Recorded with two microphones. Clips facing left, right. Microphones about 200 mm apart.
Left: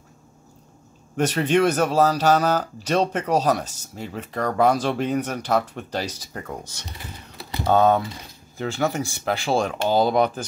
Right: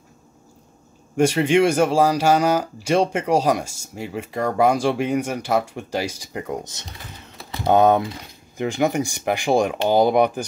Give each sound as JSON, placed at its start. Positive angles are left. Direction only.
{"t": 1.1, "sound": "speech", "side_deg": -10}